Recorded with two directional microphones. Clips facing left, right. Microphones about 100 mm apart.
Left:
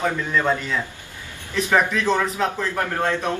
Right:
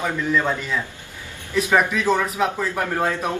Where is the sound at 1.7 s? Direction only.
10° right (ahead or behind).